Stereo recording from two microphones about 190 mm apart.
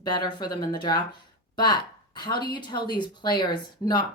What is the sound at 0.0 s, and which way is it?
Speech, 20° left (ahead or behind).